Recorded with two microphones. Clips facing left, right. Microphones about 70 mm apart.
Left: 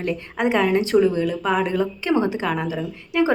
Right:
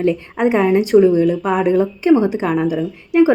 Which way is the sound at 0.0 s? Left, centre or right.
Right.